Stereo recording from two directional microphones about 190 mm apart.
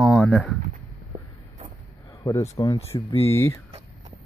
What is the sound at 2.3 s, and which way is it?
Speech, 20° left (ahead or behind).